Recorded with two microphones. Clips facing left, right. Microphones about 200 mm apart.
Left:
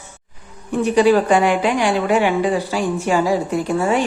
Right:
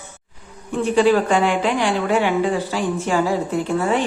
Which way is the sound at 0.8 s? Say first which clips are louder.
Left 2 dB; 15° left (ahead or behind).